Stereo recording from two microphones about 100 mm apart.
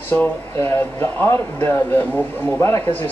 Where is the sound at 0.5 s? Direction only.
25° left (ahead or behind).